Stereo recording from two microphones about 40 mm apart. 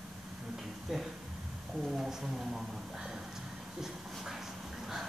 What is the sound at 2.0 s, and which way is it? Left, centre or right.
Speech, centre.